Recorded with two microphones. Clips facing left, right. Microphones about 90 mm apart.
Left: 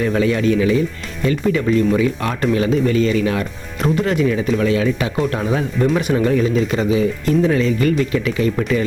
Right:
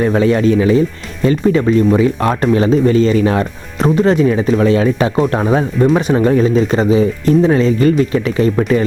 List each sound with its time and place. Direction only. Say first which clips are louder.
0.0 s speech: right 5 dB; 35° right (ahead or behind)